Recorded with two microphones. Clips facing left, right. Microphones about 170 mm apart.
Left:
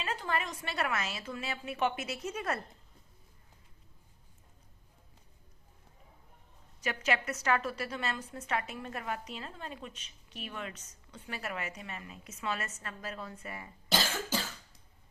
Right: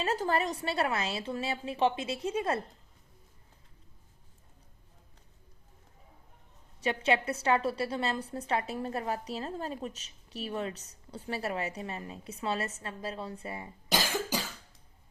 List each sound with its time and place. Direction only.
0.0 s a woman's voice: 40° right (ahead or behind)
6.8 s a woman's voice: 30° right (ahead or behind)
13.9 s cough: 15° right (ahead or behind)